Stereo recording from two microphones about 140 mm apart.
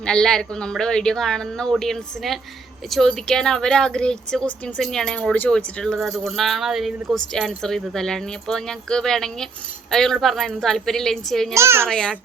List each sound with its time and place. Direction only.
0.0 s speech: 5° left (ahead or behind)
11.5 s a child's voice: 20° right (ahead or behind)
11.9 s a child's voice: 5° left (ahead or behind)